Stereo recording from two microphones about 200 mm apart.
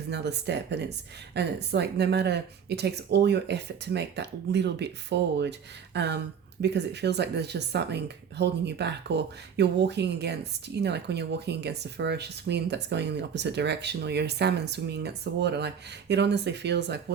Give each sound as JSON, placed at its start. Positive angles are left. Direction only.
{"t": 0.1, "sound": "speech", "side_deg": -55}